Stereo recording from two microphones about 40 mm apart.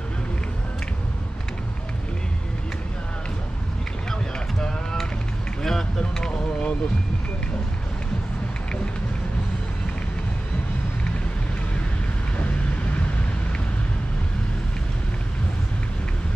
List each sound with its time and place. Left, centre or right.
4.1 s boat: centre
5.6 s vehicle: centre
5.9 s music: centre